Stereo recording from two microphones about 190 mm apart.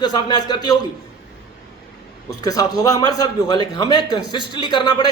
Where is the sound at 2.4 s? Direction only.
20° left (ahead or behind).